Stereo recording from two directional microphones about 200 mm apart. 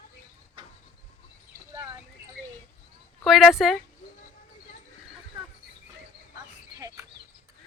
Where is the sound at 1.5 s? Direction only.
15° right (ahead or behind).